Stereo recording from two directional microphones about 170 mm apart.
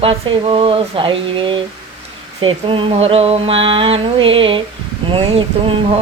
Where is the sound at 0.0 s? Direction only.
30° right (ahead or behind).